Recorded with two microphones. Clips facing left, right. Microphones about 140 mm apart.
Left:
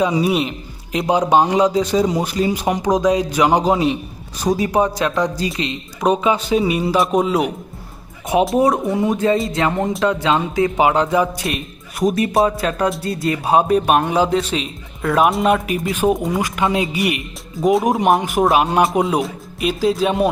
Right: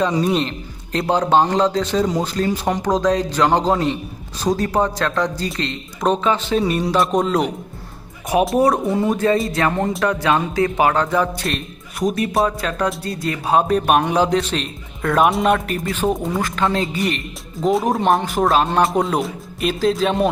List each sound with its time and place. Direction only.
0.0 s speech: 10° left (ahead or behind)
8.5 s speech: 20° left (ahead or behind)
11.4 s speech: centre (ahead or behind)
18.2 s speech: 15° left (ahead or behind)
18.8 s speech: centre (ahead or behind)